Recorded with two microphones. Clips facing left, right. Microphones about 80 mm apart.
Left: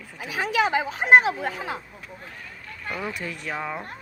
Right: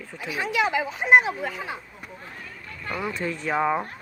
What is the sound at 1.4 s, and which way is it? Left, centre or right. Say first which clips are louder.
Speech: left 2 dB; left.